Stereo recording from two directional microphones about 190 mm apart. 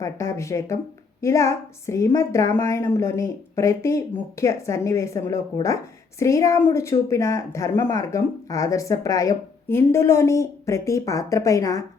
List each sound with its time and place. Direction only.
0.0 s a woman's voice: 15° left (ahead or behind)